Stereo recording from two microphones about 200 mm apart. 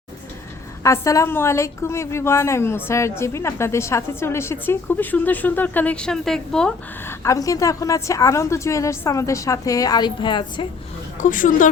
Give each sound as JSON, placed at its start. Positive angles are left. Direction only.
{"t": 0.8, "sound": "a woman's voice", "side_deg": 15}
{"t": 11.2, "sound": "speech", "side_deg": 40}